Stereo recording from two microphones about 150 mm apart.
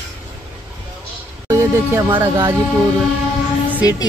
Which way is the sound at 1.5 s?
20° right (ahead or behind).